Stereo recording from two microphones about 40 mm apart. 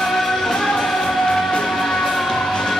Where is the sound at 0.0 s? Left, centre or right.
Centre.